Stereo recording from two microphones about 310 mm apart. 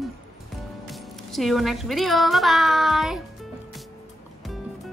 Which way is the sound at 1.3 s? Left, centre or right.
Centre.